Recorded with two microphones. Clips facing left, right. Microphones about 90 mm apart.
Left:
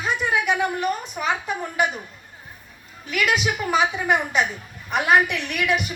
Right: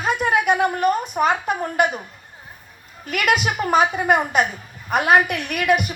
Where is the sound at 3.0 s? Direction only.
50° right (ahead or behind).